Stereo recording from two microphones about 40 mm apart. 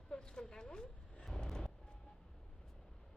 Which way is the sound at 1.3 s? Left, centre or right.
Centre.